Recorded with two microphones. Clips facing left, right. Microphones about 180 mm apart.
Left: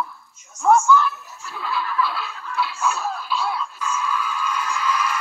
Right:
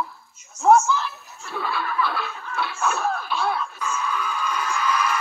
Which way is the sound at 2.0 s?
55° right (ahead or behind).